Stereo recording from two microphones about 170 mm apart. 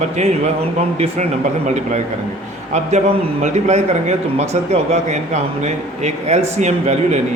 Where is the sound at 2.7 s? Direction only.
45° right (ahead or behind).